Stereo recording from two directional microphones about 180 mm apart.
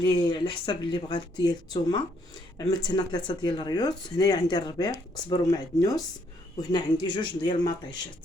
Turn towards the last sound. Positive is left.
turn(degrees=25)  # may be behind; listen again after turning